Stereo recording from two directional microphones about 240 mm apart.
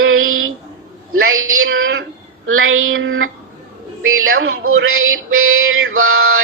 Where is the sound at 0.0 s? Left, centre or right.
Right.